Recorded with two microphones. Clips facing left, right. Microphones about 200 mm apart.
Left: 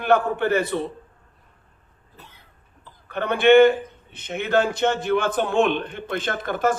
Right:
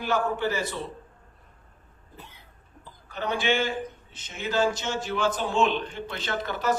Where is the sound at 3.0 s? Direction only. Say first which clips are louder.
Left 10 dB; 60° left (ahead or behind).